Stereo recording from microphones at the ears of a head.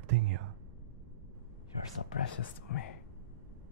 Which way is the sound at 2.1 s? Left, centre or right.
Left.